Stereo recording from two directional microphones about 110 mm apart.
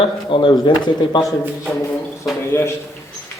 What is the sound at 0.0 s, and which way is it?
Speech, 50° left (ahead or behind).